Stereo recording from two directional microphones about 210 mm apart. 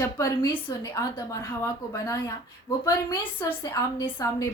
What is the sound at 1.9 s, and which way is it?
A woman's voice, 15° left (ahead or behind).